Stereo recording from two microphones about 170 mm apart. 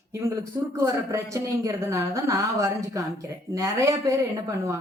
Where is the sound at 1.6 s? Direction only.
20° right (ahead or behind).